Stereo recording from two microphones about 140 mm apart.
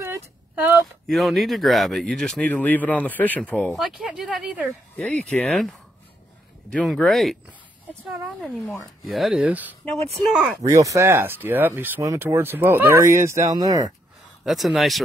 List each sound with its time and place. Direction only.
0.0 s a sound: 15° right (ahead or behind)
1.0 s speech: centre (ahead or behind)
4.9 s speech: 10° left (ahead or behind)
7.4 s a sound: 10° right (ahead or behind)
9.0 s speech: centre (ahead or behind)
10.6 s speech: 25° right (ahead or behind)
14.4 s speech: centre (ahead or behind)